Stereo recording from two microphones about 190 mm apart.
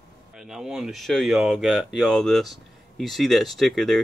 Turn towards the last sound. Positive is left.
turn(degrees=0)  # may be behind; listen again after turning